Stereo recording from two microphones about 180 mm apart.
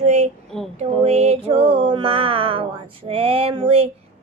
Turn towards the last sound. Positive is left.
turn(degrees=-30)  # may be behind; listen again after turning